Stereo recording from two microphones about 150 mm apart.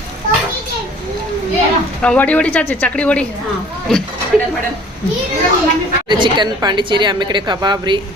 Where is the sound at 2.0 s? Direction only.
10° left (ahead or behind).